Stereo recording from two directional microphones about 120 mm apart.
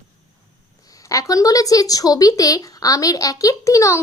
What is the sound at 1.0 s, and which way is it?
A woman's voice, 25° left (ahead or behind).